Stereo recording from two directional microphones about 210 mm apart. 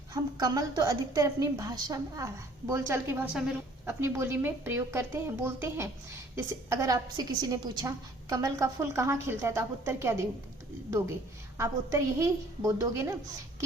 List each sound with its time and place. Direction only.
0.1 s a woman's voice: 20° right (ahead or behind)
11.5 s a woman's voice: 15° right (ahead or behind)